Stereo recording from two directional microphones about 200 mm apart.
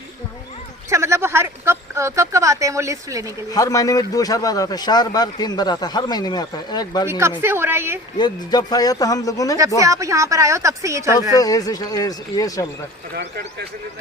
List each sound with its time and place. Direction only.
0.9 s speech: 15° right (ahead or behind)
3.5 s a man's voice: 15° left (ahead or behind)
7.1 s a woman's voice: 10° right (ahead or behind)
8.2 s speech: 20° left (ahead or behind)
9.8 s a woman's voice: 15° right (ahead or behind)
11.3 s speech: 20° left (ahead or behind)